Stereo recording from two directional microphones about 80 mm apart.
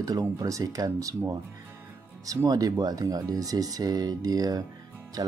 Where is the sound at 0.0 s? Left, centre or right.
Right.